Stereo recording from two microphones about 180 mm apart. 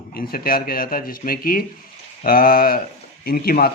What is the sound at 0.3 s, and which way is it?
Speech, 55° left (ahead or behind).